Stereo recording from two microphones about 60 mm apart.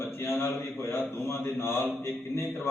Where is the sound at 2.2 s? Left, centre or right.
Left.